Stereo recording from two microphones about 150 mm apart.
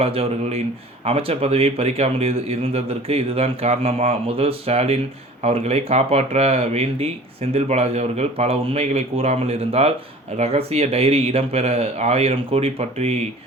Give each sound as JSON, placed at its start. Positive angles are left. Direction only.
{"t": 0.0, "sound": "speech", "side_deg": -40}